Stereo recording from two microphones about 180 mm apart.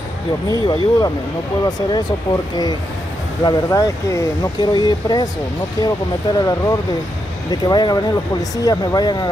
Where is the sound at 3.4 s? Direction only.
20° left (ahead or behind).